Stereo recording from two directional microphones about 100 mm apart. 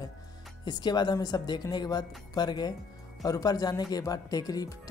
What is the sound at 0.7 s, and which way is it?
A woman's voice, 45° left (ahead or behind).